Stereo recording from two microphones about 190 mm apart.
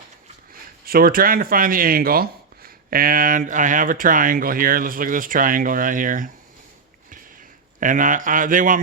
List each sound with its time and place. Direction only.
0.9 s speech: 50° right (ahead or behind)
7.8 s speech: 45° right (ahead or behind)